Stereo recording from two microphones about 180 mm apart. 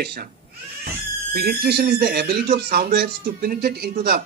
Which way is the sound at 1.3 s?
60° right (ahead or behind).